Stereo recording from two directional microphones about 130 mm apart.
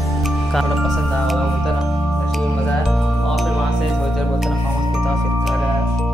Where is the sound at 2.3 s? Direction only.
Centre (ahead or behind).